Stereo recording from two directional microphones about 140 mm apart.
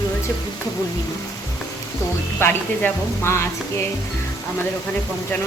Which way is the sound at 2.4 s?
15° left (ahead or behind).